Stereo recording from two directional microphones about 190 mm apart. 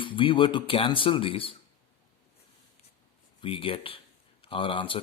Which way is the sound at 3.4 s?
25° left (ahead or behind).